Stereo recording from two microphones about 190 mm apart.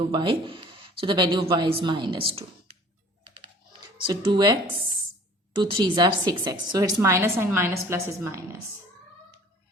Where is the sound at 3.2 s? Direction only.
30° right (ahead or behind).